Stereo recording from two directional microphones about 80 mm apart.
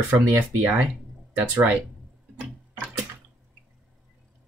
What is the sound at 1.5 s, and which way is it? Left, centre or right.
Speech, right.